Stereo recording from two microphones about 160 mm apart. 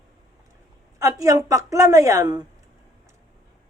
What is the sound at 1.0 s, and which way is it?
Speech, 20° right (ahead or behind).